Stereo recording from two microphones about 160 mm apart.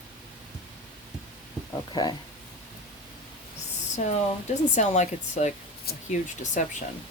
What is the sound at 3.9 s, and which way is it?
Speech, 50° left (ahead or behind).